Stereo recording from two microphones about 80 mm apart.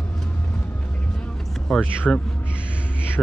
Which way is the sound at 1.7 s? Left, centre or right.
Centre.